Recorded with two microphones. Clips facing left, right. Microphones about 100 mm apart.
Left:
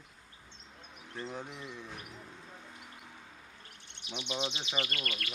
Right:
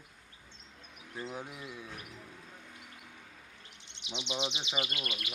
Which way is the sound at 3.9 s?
20° right (ahead or behind).